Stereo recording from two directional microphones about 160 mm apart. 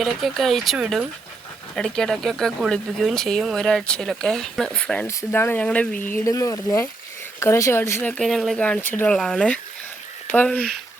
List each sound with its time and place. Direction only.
0.0 s speech: centre (ahead or behind)
8.2 s speech: centre (ahead or behind)